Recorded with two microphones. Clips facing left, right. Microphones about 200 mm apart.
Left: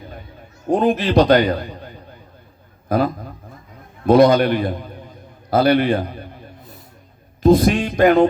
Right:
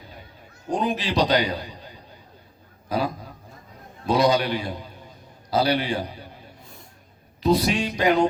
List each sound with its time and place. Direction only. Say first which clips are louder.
0.7 s a man's voice: left 8 dB; 55° left (ahead or behind)
7.4 s a man's voice: left 7 dB; 50° left (ahead or behind)